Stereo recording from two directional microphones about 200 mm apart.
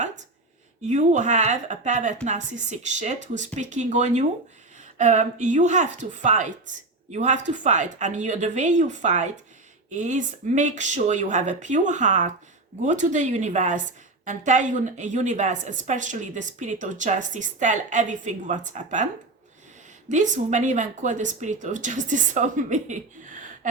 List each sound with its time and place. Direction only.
0.8 s a woman's voice: 35° right (ahead or behind)
20.1 s a woman's voice: 35° right (ahead or behind)